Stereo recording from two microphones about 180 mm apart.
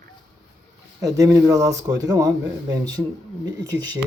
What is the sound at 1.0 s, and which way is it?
A man's voice, 20° right (ahead or behind).